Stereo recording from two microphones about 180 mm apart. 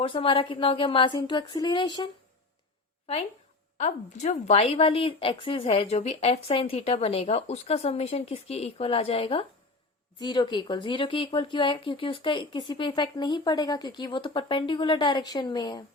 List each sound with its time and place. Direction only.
0.0 s speech: 30° left (ahead or behind)
3.8 s a woman's voice: 40° left (ahead or behind); by 15.8 s 20° left (ahead or behind)